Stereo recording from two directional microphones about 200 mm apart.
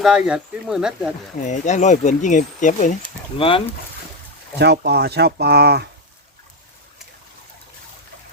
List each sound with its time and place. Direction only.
0.0 s speech: 5° right (ahead or behind)
1.4 s speech: 35° left (ahead or behind)
3.3 s speech: 25° left (ahead or behind)
4.5 s speech: 55° right (ahead or behind)